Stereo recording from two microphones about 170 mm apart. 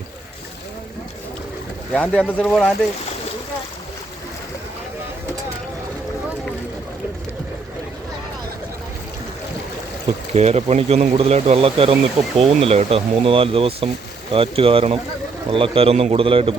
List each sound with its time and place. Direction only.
1.9 s speech: 5° left (ahead or behind)
10.3 s speech: 40° right (ahead or behind)